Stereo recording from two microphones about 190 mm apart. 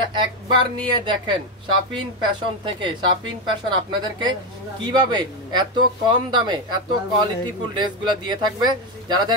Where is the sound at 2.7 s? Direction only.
25° right (ahead or behind).